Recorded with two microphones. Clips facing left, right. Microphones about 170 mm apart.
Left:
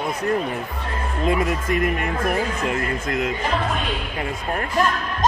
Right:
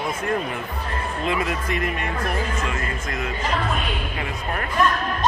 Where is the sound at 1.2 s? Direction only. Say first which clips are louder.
Left 4 dB; 45° left (ahead or behind).